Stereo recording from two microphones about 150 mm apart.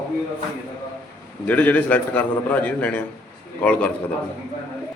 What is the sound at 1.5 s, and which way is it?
A man's voice, 10° left (ahead or behind).